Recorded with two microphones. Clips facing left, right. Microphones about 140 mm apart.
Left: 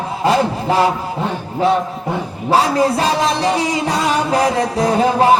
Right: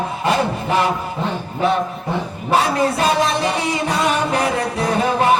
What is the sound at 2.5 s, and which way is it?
Sawing, 35° left (ahead or behind).